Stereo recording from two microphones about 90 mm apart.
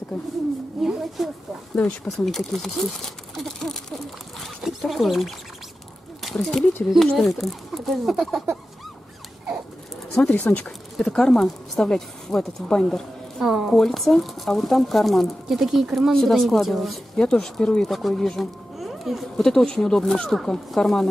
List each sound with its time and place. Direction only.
0.1 s speech: 5° left (ahead or behind)
4.6 s speech: centre (ahead or behind)
10.3 s speech: 15° left (ahead or behind)
11.0 s speech: 5° left (ahead or behind)